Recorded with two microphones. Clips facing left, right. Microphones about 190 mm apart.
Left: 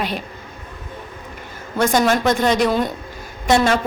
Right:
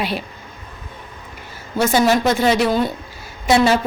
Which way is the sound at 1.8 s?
5° right (ahead or behind).